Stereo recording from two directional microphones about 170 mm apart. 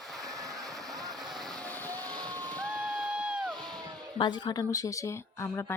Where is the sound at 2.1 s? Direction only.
5° left (ahead or behind).